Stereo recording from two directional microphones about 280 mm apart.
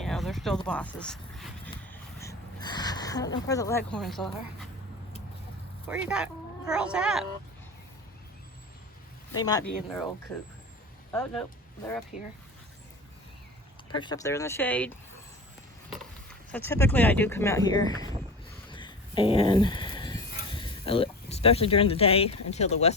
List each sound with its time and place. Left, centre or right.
0.0 s a sound: centre
5.9 s speech: centre
9.4 s speech: centre
11.1 s speech: centre
13.9 s speech: centre
16.5 s speech: centre
18.7 s a sound: centre